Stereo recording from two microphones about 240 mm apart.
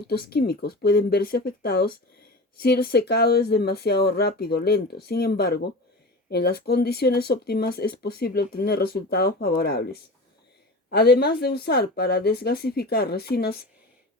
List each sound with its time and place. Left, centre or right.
0.1 s speech: left